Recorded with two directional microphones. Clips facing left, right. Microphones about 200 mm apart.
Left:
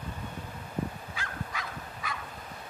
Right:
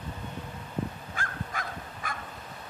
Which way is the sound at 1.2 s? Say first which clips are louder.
Right 3 dB; 50° right (ahead or behind).